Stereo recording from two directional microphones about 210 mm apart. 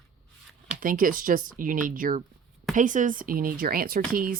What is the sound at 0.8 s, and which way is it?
Speech, 40° right (ahead or behind).